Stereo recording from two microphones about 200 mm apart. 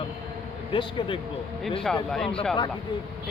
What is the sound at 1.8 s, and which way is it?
Speech, centre (ahead or behind).